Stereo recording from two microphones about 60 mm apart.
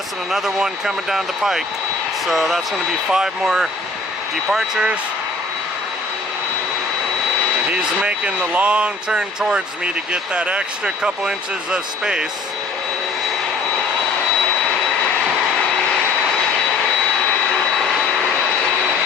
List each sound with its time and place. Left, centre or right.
0.3 s speech: centre
8.0 s speech: right